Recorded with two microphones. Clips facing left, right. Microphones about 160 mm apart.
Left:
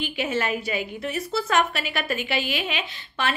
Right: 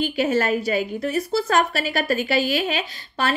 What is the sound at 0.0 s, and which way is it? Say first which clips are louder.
A woman's voice: right 6 dB; 40° right (ahead or behind).